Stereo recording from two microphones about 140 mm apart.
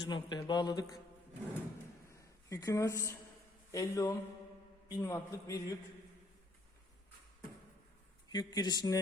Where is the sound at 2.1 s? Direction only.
20° left (ahead or behind).